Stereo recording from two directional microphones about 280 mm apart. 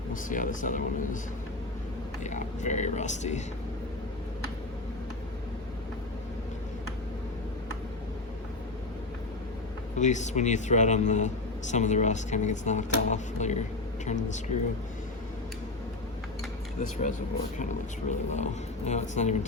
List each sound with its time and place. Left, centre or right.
0.1 s speech: left
2.2 s speech: left
10.0 s speech: left
17.6 s speech: left